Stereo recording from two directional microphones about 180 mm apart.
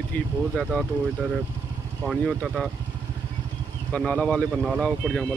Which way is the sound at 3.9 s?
5° left (ahead or behind).